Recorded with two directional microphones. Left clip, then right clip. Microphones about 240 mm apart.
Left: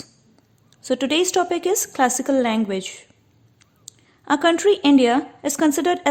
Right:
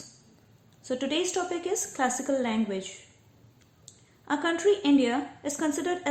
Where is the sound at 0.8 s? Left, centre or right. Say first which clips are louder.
Left 9 dB; left.